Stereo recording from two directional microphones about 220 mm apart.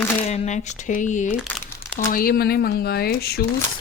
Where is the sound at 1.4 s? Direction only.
10° left (ahead or behind).